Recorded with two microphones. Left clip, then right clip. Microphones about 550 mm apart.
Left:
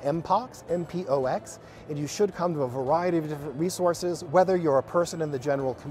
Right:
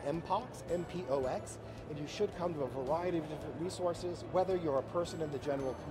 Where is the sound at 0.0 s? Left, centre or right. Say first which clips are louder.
Left 10 dB; left.